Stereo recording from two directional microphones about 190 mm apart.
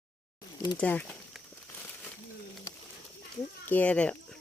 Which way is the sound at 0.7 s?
5° left (ahead or behind).